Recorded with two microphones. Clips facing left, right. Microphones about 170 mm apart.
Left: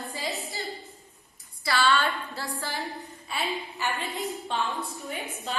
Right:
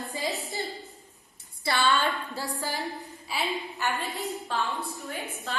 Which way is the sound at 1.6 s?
20° right (ahead or behind).